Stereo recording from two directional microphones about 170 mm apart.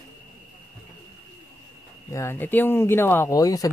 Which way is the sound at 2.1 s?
15° left (ahead or behind).